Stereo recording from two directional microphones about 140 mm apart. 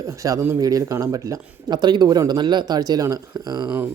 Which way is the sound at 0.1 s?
25° right (ahead or behind).